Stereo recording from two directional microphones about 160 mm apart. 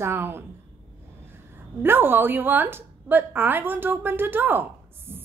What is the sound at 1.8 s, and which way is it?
A woman's voice, 15° right (ahead or behind).